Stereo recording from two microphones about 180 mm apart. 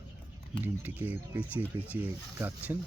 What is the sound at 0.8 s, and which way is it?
Speech, 10° right (ahead or behind).